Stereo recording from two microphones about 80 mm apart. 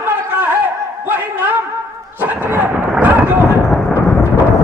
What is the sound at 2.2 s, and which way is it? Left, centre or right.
Speech, right.